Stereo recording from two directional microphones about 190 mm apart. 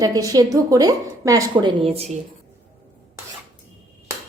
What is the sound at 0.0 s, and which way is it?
A woman's voice, 20° right (ahead or behind).